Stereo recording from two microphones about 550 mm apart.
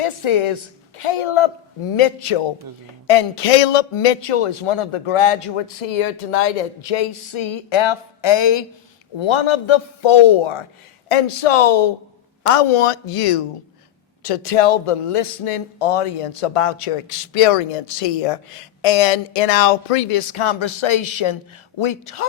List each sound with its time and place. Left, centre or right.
0.0 s a woman's voice: left